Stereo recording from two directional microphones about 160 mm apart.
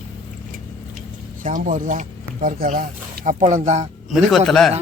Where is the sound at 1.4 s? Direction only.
55° right (ahead or behind).